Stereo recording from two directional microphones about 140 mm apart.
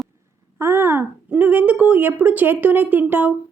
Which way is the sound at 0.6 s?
15° right (ahead or behind).